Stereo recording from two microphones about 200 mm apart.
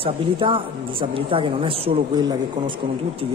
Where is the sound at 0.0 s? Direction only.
25° right (ahead or behind).